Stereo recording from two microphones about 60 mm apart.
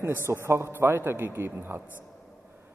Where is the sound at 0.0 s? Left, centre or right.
Right.